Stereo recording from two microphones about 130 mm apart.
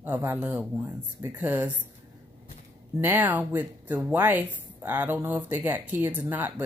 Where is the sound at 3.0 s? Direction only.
15° right (ahead or behind).